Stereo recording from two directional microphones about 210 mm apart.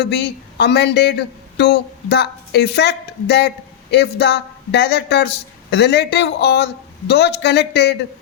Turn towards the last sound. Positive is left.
turn(degrees=55)  # may be behind; listen again after turning